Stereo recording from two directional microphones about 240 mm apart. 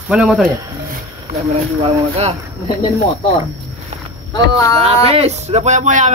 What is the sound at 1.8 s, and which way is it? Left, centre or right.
Speech, right.